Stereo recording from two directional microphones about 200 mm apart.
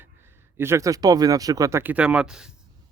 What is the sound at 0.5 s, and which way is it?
Speech, 10° right (ahead or behind).